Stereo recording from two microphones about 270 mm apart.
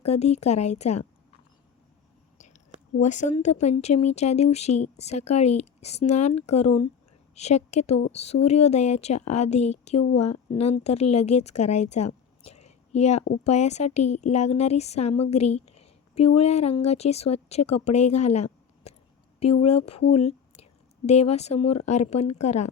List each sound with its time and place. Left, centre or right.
0.0 s a woman's voice: left
3.0 s a woman's voice: left
20.1 s whispering: left
21.1 s a woman's voice: left